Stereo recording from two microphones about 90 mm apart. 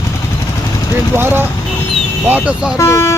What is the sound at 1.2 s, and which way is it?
Speech, 25° right (ahead or behind).